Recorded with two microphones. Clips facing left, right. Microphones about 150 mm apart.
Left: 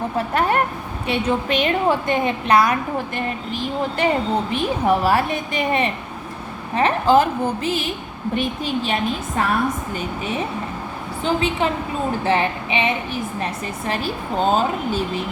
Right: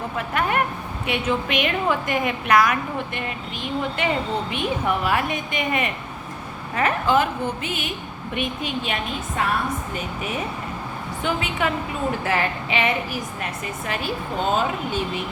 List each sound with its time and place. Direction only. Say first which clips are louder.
0.2 s a woman's voice: left 3 dB; 35° left (ahead or behind)
11.2 s a woman's voice: left 4 dB; 30° left (ahead or behind)
13.4 s a woman's voice: left 4 dB; 35° left (ahead or behind)